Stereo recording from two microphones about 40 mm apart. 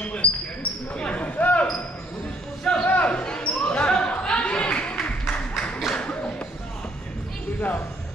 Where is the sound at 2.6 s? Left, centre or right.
Left.